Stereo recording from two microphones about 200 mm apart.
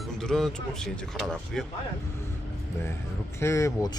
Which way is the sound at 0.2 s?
Centre (ahead or behind).